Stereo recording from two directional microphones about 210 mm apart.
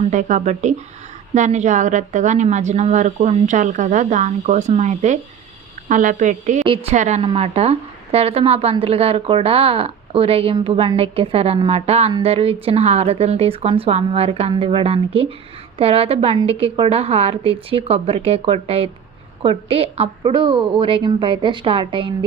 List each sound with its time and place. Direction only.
0.1 s a woman's voice: 35° right (ahead or behind)